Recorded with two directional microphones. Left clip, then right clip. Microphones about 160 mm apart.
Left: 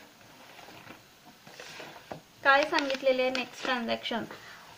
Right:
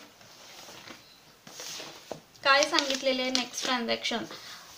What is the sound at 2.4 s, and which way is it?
A woman's voice, 30° left (ahead or behind).